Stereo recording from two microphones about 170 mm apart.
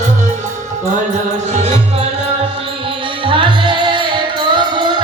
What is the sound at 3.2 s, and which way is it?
Music, 30° right (ahead or behind).